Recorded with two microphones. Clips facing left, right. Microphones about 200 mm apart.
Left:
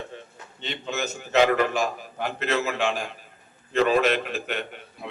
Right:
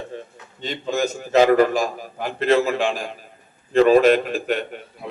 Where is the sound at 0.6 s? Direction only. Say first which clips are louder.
Right 7 dB; 40° right (ahead or behind).